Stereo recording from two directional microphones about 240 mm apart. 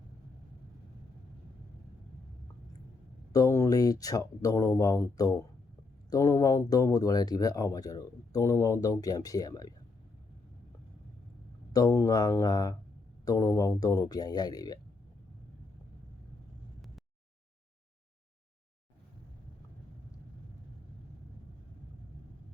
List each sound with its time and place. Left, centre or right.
3.3 s speech: centre
11.7 s speech: centre